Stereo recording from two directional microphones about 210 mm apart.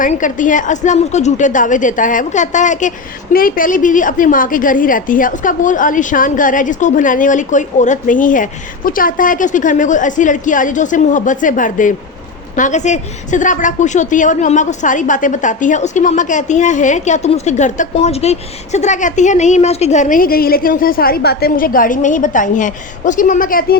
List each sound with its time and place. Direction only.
0.0 s a woman's voice: 40° left (ahead or behind)